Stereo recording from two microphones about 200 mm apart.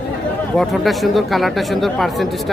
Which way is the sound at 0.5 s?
Centre (ahead or behind).